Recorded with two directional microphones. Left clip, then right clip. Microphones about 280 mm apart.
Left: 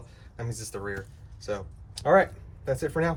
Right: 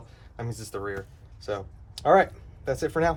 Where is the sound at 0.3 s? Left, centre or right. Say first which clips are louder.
Right 2 dB; centre.